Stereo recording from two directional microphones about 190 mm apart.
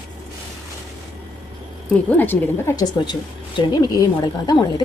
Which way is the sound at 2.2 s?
10° left (ahead or behind).